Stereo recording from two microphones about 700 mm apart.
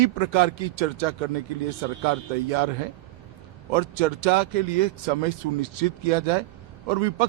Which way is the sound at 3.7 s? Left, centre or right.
Right.